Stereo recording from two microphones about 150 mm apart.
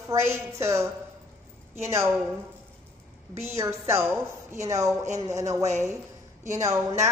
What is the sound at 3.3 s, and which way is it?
A woman's voice, 20° right (ahead or behind).